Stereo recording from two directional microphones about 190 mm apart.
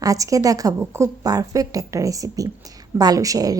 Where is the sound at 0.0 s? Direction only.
15° right (ahead or behind).